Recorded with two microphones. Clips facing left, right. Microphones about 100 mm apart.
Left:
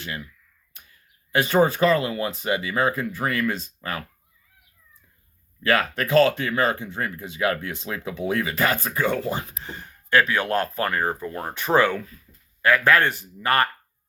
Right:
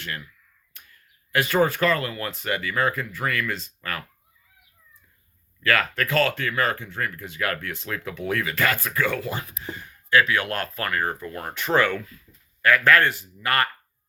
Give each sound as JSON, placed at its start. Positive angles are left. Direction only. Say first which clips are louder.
{"t": 1.3, "sound": "speech", "louder": "left 2 dB", "side_deg": 20}
{"t": 5.6, "sound": "speech", "louder": "left 1 dB", "side_deg": 20}
{"t": 11.6, "sound": "speech", "louder": "left 2 dB", "side_deg": 15}